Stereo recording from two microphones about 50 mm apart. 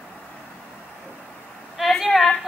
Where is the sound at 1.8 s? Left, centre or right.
Centre.